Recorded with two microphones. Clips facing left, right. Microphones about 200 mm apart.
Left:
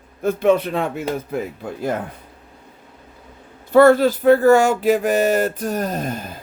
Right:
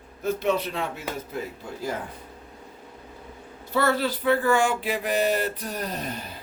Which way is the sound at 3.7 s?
50° left (ahead or behind).